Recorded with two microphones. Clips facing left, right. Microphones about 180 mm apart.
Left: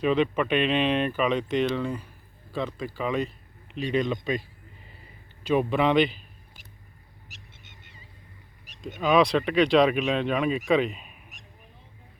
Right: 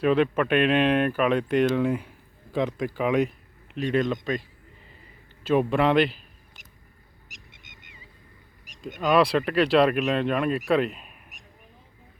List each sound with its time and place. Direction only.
0.0 s speech: 5° right (ahead or behind)
3.9 s speech: centre (ahead or behind)
5.5 s speech: centre (ahead or behind)
7.3 s a sound: 15° right (ahead or behind)
8.6 s a sound: 10° right (ahead or behind)
9.0 s speech: centre (ahead or behind)